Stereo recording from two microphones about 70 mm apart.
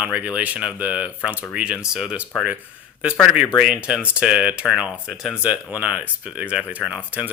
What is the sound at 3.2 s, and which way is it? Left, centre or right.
Speech, centre.